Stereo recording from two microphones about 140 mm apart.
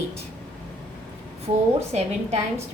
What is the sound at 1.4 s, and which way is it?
Speech, 50° right (ahead or behind).